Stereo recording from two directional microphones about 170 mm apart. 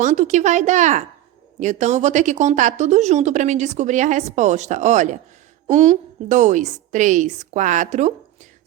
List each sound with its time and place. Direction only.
0.0 s speech: 45° right (ahead or behind)